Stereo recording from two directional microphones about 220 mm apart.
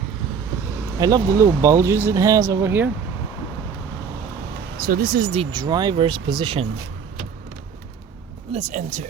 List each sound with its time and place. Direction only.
0.9 s speech: 15° right (ahead or behind)
4.8 s speech: 40° right (ahead or behind)
5.3 s speech: 20° right (ahead or behind)
8.5 s speech: 35° right (ahead or behind)